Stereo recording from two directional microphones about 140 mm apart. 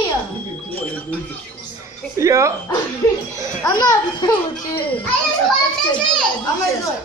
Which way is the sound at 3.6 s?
30° left (ahead or behind).